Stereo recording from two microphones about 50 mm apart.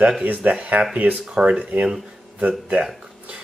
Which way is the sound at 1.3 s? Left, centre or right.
Right.